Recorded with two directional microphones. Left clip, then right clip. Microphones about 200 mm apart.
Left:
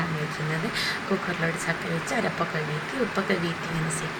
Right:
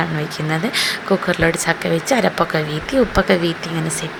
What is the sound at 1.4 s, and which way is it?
Speech, 50° right (ahead or behind).